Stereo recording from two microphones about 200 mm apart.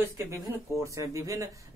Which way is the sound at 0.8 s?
15° right (ahead or behind).